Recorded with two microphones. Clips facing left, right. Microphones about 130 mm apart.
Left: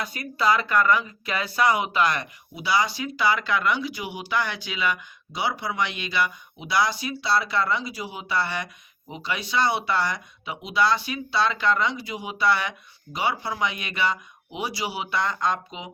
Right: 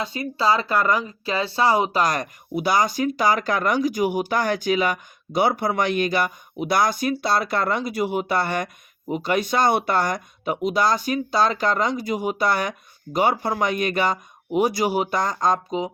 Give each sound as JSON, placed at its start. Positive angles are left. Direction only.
{"t": 0.0, "sound": "speech", "side_deg": -25}